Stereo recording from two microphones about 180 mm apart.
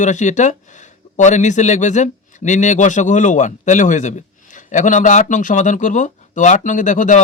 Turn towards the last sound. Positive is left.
turn(degrees=45)  # may be behind; listen again after turning